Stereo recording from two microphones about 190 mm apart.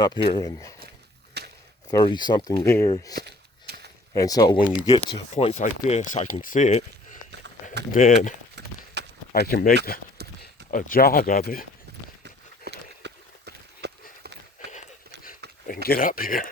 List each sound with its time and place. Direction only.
0.0 s speech: 20° left (ahead or behind)
1.4 s a sound: 60° right (ahead or behind)
1.9 s speech: 20° left (ahead or behind)
3.2 s a sound: 55° right (ahead or behind)
4.1 s speech: 20° left (ahead or behind)
5.3 s speech: 35° left (ahead or behind)
9.0 s a sound: 65° right (ahead or behind)
9.3 s speech: 50° left (ahead or behind)
12.2 s horse: 65° right (ahead or behind)
15.6 s speech: 50° left (ahead or behind)